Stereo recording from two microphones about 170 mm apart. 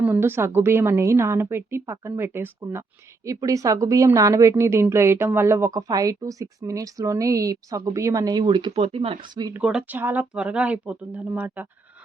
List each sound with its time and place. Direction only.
0.0 s a woman's voice: 10° right (ahead or behind)
9.6 s a woman's voice: 5° right (ahead or behind)